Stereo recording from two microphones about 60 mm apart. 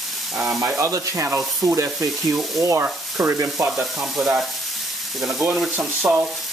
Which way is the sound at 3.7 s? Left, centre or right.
Centre.